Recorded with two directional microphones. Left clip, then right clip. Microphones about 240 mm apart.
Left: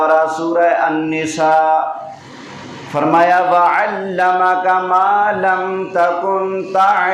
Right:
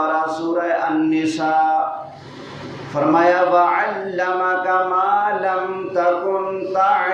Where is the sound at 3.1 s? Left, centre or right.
Left.